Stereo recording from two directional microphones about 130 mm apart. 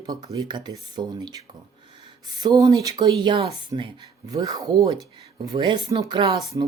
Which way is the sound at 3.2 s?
40° right (ahead or behind).